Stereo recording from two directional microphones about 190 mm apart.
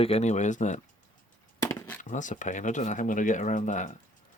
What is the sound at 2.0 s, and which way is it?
Speech, 40° left (ahead or behind).